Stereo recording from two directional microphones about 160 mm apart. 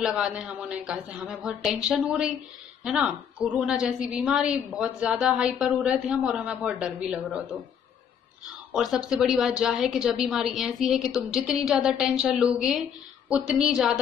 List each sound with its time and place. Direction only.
0.0 s a woman's voice: 5° right (ahead or behind)
8.7 s a woman's voice: 5° right (ahead or behind)